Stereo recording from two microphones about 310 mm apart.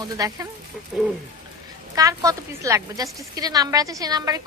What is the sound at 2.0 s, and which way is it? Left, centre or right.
Speech, centre.